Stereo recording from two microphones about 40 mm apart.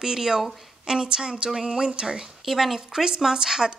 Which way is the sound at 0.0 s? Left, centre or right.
Centre.